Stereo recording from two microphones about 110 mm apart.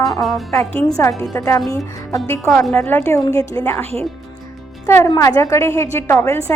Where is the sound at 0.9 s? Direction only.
30° left (ahead or behind).